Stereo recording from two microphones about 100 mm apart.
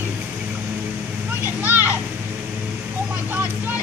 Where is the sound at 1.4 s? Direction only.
20° right (ahead or behind).